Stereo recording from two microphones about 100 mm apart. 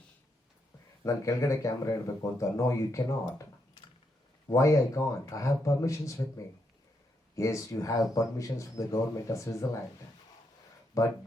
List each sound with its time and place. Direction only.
1.0 s speech: 35° left (ahead or behind)
4.5 s speech: 30° left (ahead or behind)
10.9 s speech: 30° left (ahead or behind)